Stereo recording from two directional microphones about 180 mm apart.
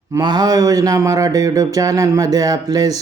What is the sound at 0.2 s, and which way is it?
Speech, 25° right (ahead or behind).